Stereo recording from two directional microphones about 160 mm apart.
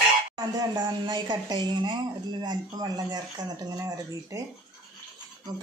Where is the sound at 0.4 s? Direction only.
25° right (ahead or behind).